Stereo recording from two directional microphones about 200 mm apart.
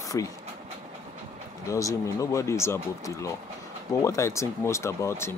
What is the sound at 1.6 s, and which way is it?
Speech, 15° left (ahead or behind).